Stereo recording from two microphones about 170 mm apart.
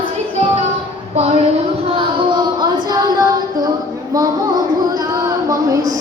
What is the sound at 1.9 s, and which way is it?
Female singing, 30° right (ahead or behind).